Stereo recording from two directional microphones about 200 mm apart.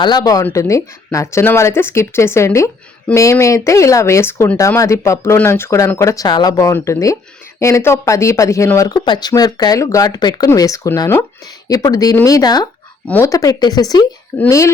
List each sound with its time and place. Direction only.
0.0 s speech: 20° left (ahead or behind)